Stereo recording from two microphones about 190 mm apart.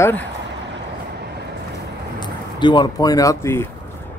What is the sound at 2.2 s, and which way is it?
Speech, 25° left (ahead or behind).